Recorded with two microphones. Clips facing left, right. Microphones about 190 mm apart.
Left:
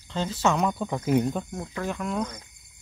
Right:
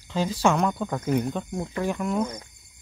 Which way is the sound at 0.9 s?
20° left (ahead or behind).